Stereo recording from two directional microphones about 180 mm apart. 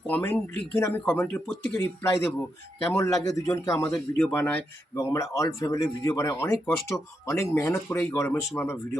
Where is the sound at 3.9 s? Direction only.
5° left (ahead or behind).